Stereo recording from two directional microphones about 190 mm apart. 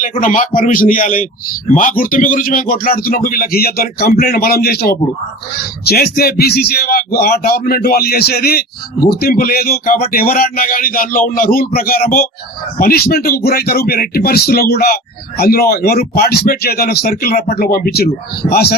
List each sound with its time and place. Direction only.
0.0 s a man's voice: 45° left (ahead or behind)